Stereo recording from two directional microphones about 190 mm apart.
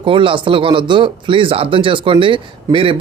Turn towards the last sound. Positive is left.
turn(degrees=-25)  # may be behind; listen again after turning